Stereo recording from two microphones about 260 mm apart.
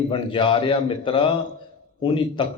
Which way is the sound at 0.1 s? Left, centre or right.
Centre.